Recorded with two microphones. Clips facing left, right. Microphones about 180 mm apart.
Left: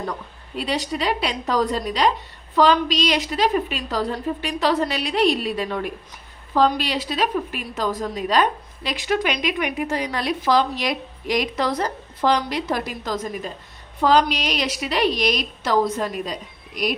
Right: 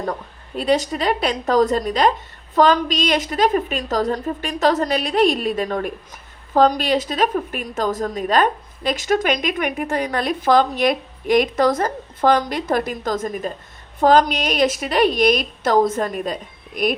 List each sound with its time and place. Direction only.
0.0 s a woman's voice: 45° right (ahead or behind)